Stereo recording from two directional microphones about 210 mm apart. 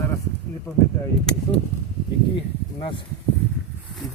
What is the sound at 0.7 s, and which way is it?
Speech, 15° left (ahead or behind).